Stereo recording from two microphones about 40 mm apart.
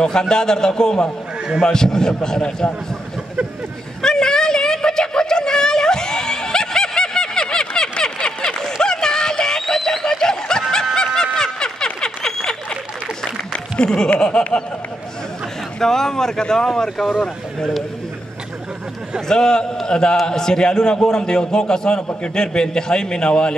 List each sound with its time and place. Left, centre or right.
0.0 s a man's voice: centre
4.0 s a sound: centre
10.0 s snicker: centre
11.3 s a sound: centre
14.2 s a man's voice: left
15.8 s a man's voice: centre
19.2 s a man's voice: centre